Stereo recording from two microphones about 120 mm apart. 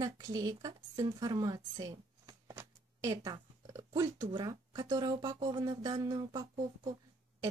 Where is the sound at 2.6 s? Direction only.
25° right (ahead or behind).